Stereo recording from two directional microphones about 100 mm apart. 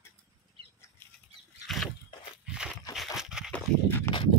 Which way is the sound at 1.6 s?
Centre (ahead or behind).